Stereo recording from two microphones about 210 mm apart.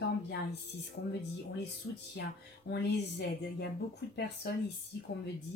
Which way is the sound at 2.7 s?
50° left (ahead or behind).